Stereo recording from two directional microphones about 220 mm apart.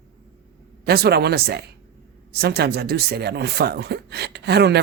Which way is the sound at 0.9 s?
45° right (ahead or behind).